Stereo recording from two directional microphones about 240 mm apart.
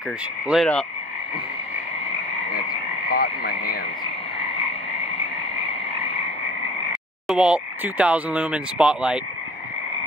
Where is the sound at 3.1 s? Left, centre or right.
Left.